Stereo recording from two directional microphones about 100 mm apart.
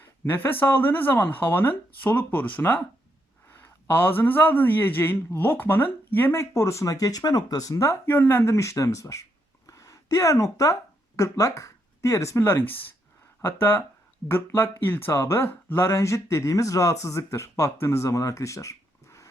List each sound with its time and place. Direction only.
0.3 s a man's voice: 20° left (ahead or behind)
9.6 s a sound: 35° left (ahead or behind)
11.2 s a man's voice: 30° left (ahead or behind)